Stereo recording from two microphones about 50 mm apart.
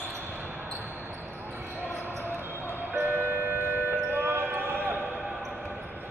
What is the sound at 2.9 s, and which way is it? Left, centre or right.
Music, right.